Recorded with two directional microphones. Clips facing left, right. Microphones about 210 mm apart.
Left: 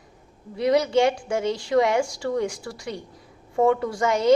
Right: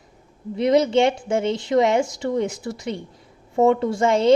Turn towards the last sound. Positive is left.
turn(degrees=-25)  # may be behind; listen again after turning